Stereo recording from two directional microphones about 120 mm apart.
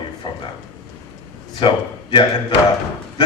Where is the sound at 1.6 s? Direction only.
45° left (ahead or behind).